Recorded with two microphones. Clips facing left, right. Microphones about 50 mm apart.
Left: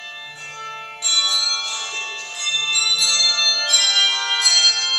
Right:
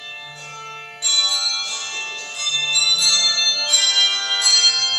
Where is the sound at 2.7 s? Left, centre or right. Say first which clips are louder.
Right 2 dB; centre.